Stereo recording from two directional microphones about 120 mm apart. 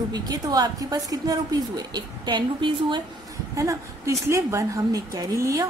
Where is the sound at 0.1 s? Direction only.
35° right (ahead or behind).